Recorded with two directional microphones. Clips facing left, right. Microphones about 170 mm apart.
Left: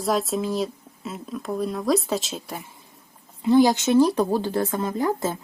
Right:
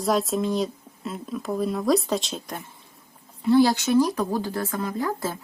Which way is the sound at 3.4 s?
20° left (ahead or behind).